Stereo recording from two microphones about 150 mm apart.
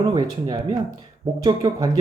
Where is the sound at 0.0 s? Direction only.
30° right (ahead or behind).